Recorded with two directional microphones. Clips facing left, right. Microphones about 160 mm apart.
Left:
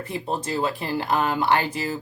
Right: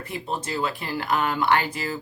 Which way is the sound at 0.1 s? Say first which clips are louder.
Left 2 dB; 35° left (ahead or behind).